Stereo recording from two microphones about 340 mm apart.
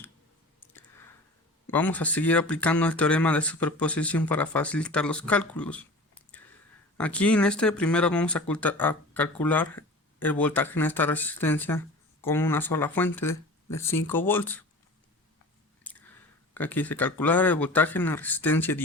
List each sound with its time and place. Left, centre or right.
1.7 s speech: centre
15.8 s a sound: centre
16.6 s speech: centre